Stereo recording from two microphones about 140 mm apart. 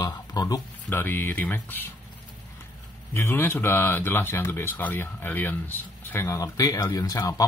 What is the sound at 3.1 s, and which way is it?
Speech, 15° left (ahead or behind).